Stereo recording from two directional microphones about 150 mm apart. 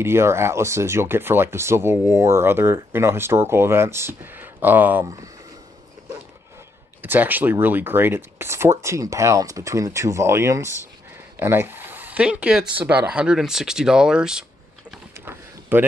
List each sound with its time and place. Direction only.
0.0 s speech: 15° right (ahead or behind)
7.0 s speech: 10° right (ahead or behind)
15.1 s a sound: 15° right (ahead or behind)